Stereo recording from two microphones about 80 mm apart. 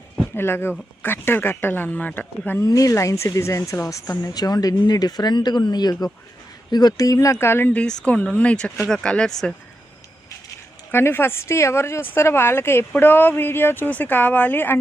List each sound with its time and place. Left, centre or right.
0.3 s speech: left
2.6 s a woman's voice: left
4.3 s speech: left
7.7 s speech: centre
10.9 s a woman's voice: left